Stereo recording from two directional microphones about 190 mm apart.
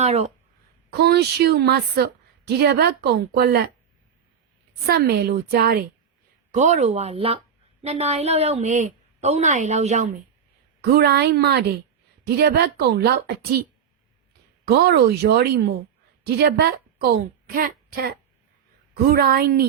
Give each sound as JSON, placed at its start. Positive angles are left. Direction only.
{"t": 0.0, "sound": "speech", "side_deg": -35}
{"t": 0.9, "sound": "a woman's voice", "side_deg": -60}
{"t": 4.9, "sound": "a woman's voice", "side_deg": -55}
{"t": 6.5, "sound": "a woman's voice", "side_deg": -40}
{"t": 10.8, "sound": "a woman's voice", "side_deg": -55}
{"t": 14.7, "sound": "a woman's voice", "side_deg": -60}